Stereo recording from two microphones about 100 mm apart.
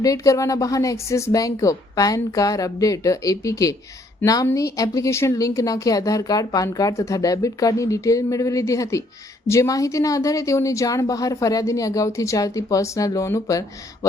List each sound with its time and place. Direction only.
0.0 s speech: 35° left (ahead or behind)